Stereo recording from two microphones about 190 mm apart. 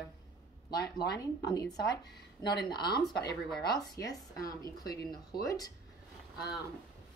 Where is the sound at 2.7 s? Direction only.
20° left (ahead or behind).